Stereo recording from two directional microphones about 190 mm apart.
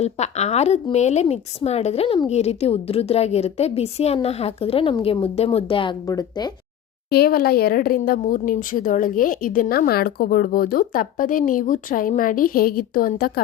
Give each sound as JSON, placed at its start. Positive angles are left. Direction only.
{"t": 0.0, "sound": "speech", "side_deg": 35}
{"t": 7.1, "sound": "speech", "side_deg": 55}